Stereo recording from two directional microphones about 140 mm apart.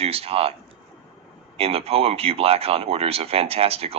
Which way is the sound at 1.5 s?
45° right (ahead or behind).